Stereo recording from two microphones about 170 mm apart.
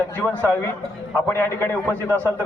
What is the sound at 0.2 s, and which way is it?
A man's voice, 10° left (ahead or behind).